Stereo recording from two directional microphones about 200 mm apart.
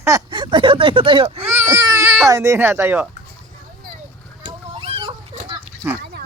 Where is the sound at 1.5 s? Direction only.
15° right (ahead or behind).